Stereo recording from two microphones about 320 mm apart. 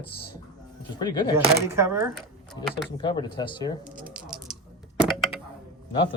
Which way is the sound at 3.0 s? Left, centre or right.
Centre.